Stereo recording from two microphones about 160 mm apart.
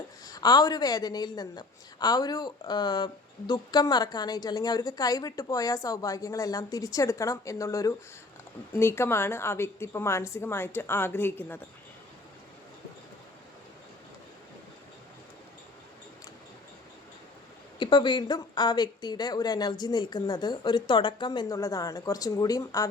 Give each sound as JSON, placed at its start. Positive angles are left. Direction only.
{"t": 0.3, "sound": "a woman's voice", "side_deg": 25}
{"t": 17.7, "sound": "a woman's voice", "side_deg": 30}